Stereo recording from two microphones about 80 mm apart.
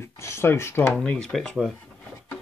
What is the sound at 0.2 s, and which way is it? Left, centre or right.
Speech, left.